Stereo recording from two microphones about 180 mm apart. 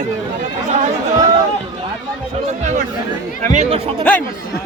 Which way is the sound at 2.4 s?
40° right (ahead or behind).